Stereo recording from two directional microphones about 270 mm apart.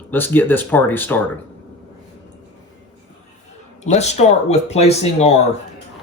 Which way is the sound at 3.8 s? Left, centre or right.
Left.